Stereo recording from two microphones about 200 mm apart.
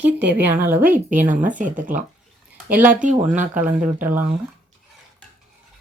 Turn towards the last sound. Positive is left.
turn(degrees=-45)  # may be behind; listen again after turning